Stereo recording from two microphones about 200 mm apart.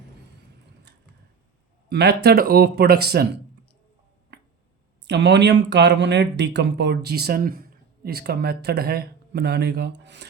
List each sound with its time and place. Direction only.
1.9 s speech: 55° right (ahead or behind)
4.3 s finger snapping: 60° right (ahead or behind)
5.0 s speech: 60° right (ahead or behind)